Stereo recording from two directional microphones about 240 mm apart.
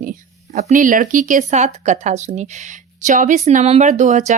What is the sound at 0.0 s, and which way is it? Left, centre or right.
A woman's voice, right.